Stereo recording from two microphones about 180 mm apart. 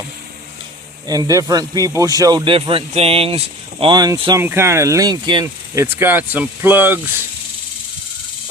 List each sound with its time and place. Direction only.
1.0 s speech: 20° right (ahead or behind)